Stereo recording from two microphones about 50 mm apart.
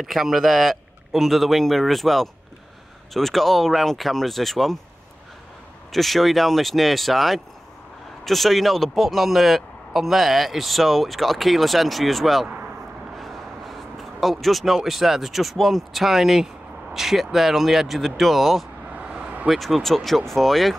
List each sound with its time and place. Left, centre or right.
0.0 s speech: centre
5.9 s speech: centre
13.2 s a sound: centre
14.8 s speech: centre
18.9 s vehicle: right
19.4 s speech: centre